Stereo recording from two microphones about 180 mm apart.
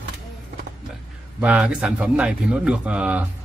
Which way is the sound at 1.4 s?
5° right (ahead or behind).